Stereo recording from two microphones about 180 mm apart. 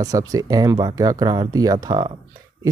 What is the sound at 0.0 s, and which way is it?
Speech, 20° right (ahead or behind).